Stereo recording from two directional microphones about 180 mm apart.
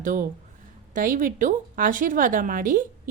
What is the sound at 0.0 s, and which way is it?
A woman's voice, 50° right (ahead or behind).